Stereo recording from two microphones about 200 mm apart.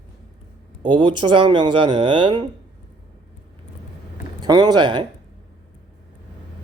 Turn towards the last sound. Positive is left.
turn(degrees=-20)  # may be behind; listen again after turning